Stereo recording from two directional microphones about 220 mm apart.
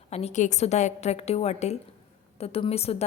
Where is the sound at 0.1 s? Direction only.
30° left (ahead or behind).